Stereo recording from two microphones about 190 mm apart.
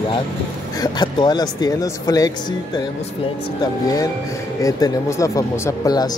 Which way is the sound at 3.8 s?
20° left (ahead or behind).